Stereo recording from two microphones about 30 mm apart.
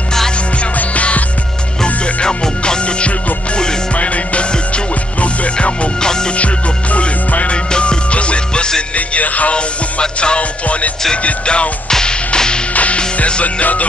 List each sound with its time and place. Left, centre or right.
2.2 s music: left
3.9 s music: left
5.9 s music: left
6.3 s music: left
7.5 s music: left
8.9 s music: left
9.5 s music: left
11.9 s music: left
12.9 s music: left